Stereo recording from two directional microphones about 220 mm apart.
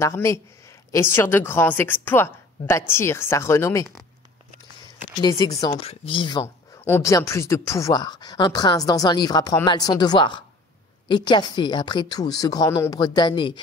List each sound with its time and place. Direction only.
0.0 s speech: 15° left (ahead or behind)
5.2 s a woman's voice: 15° left (ahead or behind)